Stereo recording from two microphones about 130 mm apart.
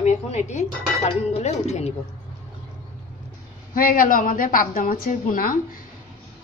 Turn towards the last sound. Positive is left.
turn(degrees=90)